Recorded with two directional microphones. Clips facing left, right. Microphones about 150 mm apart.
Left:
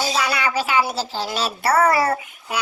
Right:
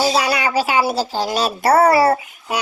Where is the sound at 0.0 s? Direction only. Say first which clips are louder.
Right 5 dB; 40° right (ahead or behind).